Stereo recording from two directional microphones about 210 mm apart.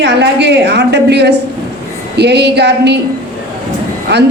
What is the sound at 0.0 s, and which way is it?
Speech, 55° right (ahead or behind).